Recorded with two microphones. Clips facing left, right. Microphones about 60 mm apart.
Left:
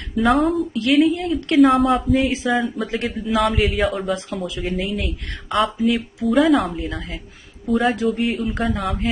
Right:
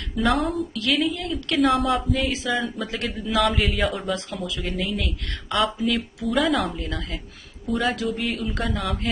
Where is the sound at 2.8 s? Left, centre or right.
Left.